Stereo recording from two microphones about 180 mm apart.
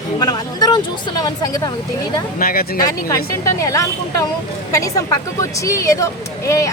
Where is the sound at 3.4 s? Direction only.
15° left (ahead or behind).